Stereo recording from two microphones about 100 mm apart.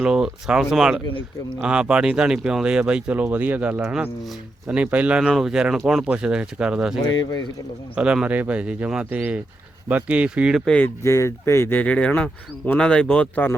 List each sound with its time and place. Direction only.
0.0 s speech: 5° right (ahead or behind)
3.8 s speech: 5° right (ahead or behind)
10.7 s speech: 15° left (ahead or behind)
11.0 s speech: 30° left (ahead or behind)